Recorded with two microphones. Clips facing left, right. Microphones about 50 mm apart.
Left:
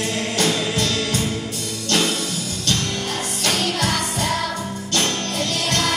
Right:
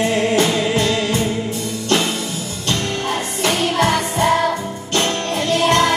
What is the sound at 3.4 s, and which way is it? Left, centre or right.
Music, right.